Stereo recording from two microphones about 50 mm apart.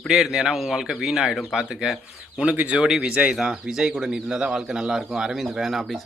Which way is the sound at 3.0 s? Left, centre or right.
Centre.